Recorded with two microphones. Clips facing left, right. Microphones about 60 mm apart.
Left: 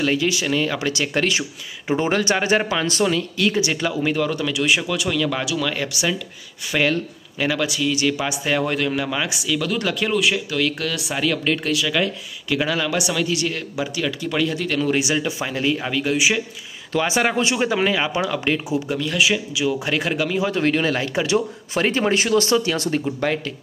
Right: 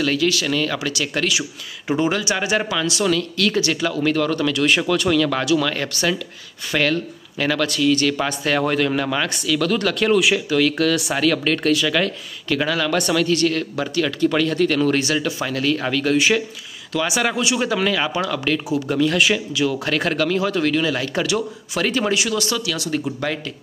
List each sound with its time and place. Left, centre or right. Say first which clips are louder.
0.0 s speech: right 1 dB; left
16.9 s speech: left 1 dB; left
18.9 s speech: right 4 dB; centre; by 21.0 s left
21.0 s speech: even; centre
21.3 s speech: left 2 dB; left